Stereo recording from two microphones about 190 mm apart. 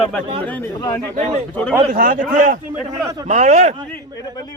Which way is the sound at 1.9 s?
45° right (ahead or behind).